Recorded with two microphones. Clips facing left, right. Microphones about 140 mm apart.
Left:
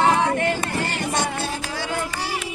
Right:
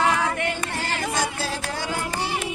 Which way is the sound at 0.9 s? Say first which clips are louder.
Left 2 dB; 90° right.